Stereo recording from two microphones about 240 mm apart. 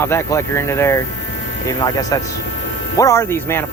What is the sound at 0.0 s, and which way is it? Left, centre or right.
Speech, centre.